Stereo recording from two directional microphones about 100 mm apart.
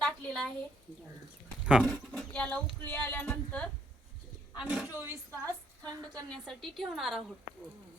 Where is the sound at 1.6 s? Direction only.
10° right (ahead or behind).